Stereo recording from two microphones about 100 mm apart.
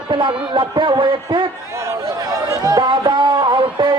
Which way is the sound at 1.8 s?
30° right (ahead or behind).